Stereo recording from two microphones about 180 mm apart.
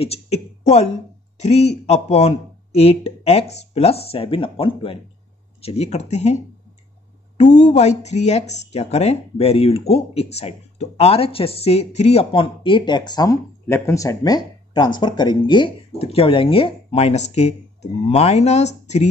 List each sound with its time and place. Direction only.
0.0 s a sound: 35° left (ahead or behind)
1.4 s speech: 35° left (ahead or behind)
7.5 s speech: 40° left (ahead or behind)